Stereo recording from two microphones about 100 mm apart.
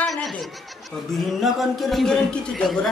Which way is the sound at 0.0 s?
10° left (ahead or behind).